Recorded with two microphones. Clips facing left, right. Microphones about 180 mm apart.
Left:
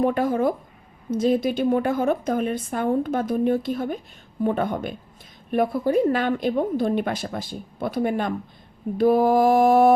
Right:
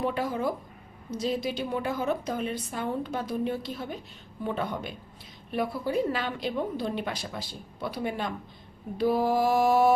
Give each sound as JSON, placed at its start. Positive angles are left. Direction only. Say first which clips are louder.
{"t": 0.0, "sound": "a woman's voice", "louder": "left 8 dB", "side_deg": 50}